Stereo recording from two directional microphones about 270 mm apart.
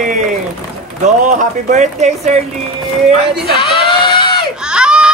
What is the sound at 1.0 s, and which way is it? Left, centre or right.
Speech, right.